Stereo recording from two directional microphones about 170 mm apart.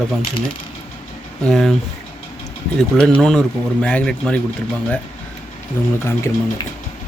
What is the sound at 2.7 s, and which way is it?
Speech, 5° left (ahead or behind).